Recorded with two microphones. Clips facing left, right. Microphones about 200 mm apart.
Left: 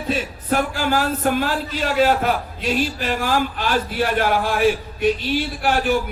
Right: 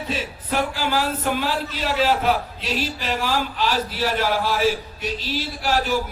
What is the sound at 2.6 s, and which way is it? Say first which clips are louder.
Speech: left 5 dB; 50° left (ahead or behind).